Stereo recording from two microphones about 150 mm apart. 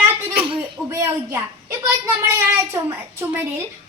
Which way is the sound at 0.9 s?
15° right (ahead or behind).